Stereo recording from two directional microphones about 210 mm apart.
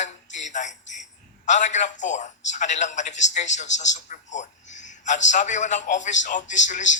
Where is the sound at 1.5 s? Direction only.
35° left (ahead or behind).